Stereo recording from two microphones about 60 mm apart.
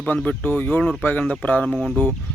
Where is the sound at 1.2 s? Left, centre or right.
Centre.